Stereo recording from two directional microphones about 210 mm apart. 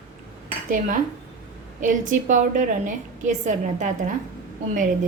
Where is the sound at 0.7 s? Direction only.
40° right (ahead or behind).